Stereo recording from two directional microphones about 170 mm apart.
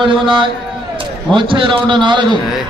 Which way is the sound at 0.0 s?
30° right (ahead or behind).